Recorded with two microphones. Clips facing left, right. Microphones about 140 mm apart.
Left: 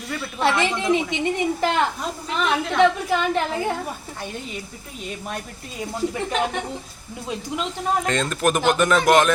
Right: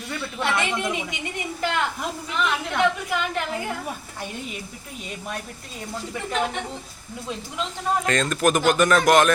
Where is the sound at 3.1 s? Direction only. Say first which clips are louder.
Left 5 dB; 35° left (ahead or behind).